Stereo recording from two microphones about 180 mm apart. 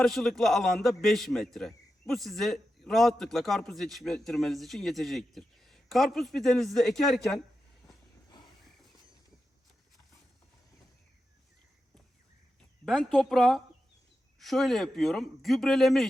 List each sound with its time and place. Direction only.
0.0 s a man's voice: centre (ahead or behind)
7.9 s train: 25° left (ahead or behind)
12.8 s a man's voice: centre (ahead or behind)